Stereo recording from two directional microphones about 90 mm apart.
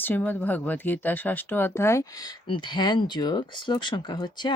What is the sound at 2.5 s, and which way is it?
Speech, 60° left (ahead or behind).